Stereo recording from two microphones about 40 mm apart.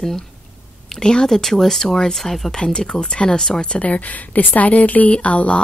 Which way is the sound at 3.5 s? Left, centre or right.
Left.